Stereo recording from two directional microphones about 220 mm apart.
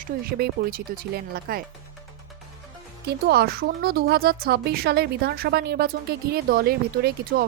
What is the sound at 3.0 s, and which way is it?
Speech, 45° right (ahead or behind).